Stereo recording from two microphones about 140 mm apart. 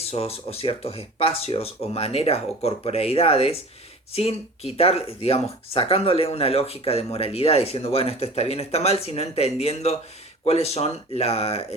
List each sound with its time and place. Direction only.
0.0 s speech: 45° left (ahead or behind)